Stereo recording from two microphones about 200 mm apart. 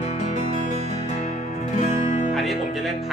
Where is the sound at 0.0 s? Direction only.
35° left (ahead or behind).